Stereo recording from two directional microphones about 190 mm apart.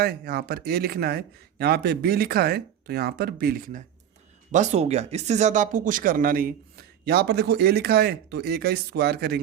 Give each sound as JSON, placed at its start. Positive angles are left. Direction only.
{"t": 0.0, "sound": "speech", "side_deg": -55}